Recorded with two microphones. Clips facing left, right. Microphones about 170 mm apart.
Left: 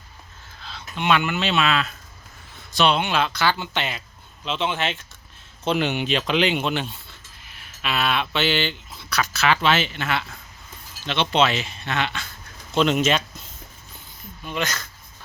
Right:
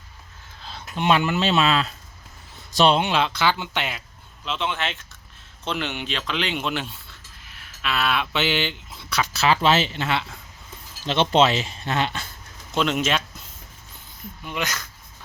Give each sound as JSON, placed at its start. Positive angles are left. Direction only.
{"t": 0.8, "sound": "speech", "side_deg": -40}
{"t": 3.1, "sound": "speech", "side_deg": -25}
{"t": 3.5, "sound": "speech", "side_deg": -10}
{"t": 4.4, "sound": "speech", "side_deg": 0}
{"t": 5.6, "sound": "speech", "side_deg": 10}
{"t": 6.6, "sound": "speech", "side_deg": 0}
{"t": 11.0, "sound": "speech", "side_deg": -40}
{"t": 12.7, "sound": "speech", "side_deg": 0}
{"t": 14.4, "sound": "speech", "side_deg": -15}